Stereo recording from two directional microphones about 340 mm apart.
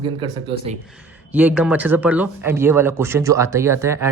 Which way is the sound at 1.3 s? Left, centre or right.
Centre.